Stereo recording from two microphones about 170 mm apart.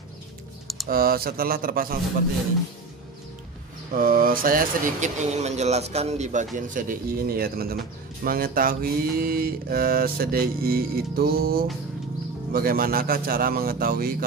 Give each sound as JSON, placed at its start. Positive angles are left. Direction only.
{"t": 0.8, "sound": "speech", "side_deg": -60}
{"t": 4.0, "sound": "speech", "side_deg": -55}